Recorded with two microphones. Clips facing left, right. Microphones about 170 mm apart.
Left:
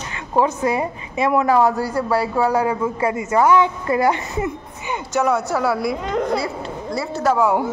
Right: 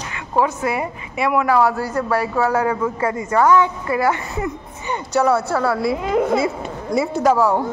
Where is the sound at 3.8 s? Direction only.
25° left (ahead or behind).